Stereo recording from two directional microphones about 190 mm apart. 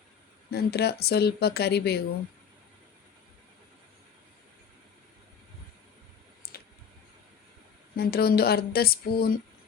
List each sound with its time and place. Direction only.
0.5 s speech: 60° left (ahead or behind)
6.4 s clicking: 55° left (ahead or behind)
7.9 s speech: 55° left (ahead or behind)